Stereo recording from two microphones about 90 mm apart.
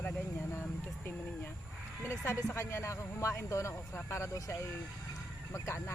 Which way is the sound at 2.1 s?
30° left (ahead or behind).